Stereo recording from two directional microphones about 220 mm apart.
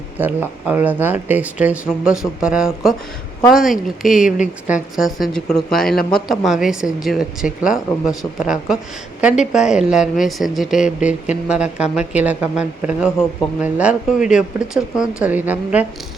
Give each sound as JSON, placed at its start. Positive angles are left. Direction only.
{"t": 0.2, "sound": "a woman's voice", "side_deg": -10}